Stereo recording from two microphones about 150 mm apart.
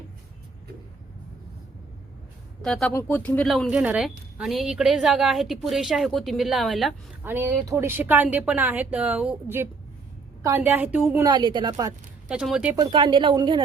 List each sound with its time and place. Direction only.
2.6 s a woman's voice: centre (ahead or behind)
2.9 s a woman's voice: 15° left (ahead or behind)
7.3 s speech: 15° right (ahead or behind)
11.3 s speech: 30° right (ahead or behind)
12.3 s a woman's voice: 5° right (ahead or behind)
12.7 s speech: 30° right (ahead or behind)